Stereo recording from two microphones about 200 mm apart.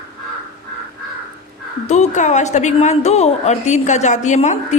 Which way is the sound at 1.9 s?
35° left (ahead or behind).